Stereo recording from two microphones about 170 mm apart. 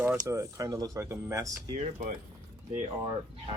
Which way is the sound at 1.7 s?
45° right (ahead or behind).